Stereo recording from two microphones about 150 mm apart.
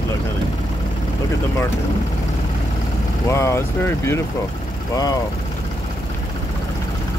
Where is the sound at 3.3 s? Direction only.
20° left (ahead or behind).